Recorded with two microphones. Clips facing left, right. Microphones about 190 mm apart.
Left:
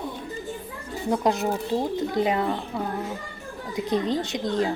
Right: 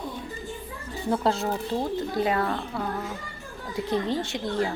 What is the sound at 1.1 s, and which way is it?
Speech, 15° left (ahead or behind).